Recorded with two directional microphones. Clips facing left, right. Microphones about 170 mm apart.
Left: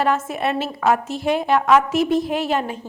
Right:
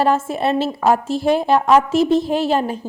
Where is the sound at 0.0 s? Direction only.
30° right (ahead or behind).